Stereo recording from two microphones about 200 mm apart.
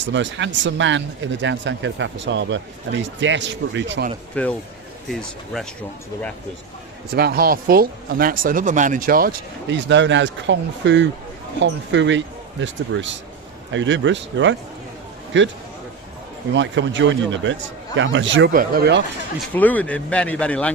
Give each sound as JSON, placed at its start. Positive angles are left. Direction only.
{"t": 0.0, "sound": "speech", "side_deg": -65}
{"t": 4.4, "sound": "speech", "side_deg": 5}
{"t": 7.1, "sound": "a man's voice", "side_deg": -50}
{"t": 18.5, "sound": "speech", "side_deg": -50}
{"t": 19.5, "sound": "speech", "side_deg": 10}